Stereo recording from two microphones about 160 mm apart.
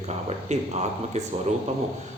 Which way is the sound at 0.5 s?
45° right (ahead or behind).